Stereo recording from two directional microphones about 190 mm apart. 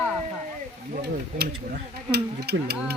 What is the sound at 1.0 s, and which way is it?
Speech, 60° right (ahead or behind).